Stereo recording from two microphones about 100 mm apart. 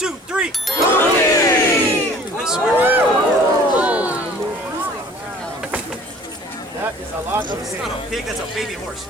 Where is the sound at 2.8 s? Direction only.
20° right (ahead or behind).